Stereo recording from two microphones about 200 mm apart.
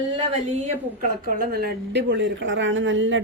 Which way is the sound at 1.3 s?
50° right (ahead or behind).